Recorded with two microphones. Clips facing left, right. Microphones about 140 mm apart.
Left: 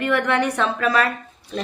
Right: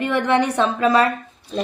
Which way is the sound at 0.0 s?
20° right (ahead or behind).